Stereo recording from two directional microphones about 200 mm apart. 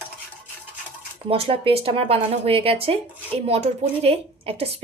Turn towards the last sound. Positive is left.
turn(degrees=-30)  # may be behind; listen again after turning